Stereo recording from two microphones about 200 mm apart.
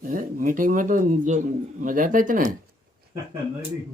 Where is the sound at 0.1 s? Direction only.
45° right (ahead or behind).